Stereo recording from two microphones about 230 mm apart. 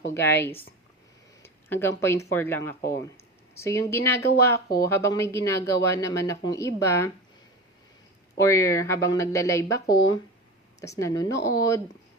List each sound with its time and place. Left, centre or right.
0.1 s speech: centre
1.4 s a sound: centre
2.3 s speech: centre
8.4 s speech: centre